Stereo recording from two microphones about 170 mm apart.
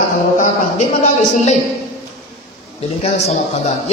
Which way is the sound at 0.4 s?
40° left (ahead or behind).